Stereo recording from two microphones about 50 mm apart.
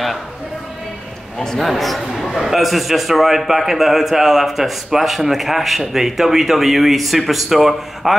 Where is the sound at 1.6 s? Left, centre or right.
Centre.